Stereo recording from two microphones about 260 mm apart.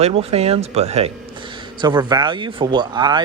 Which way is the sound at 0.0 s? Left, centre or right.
Right.